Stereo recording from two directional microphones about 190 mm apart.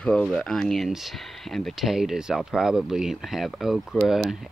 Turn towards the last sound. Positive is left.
turn(degrees=0)  # may be behind; listen again after turning